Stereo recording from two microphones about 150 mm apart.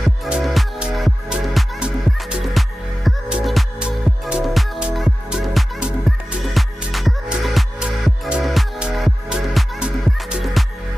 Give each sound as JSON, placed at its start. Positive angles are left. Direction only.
{"t": 0.0, "sound": "music", "side_deg": 0}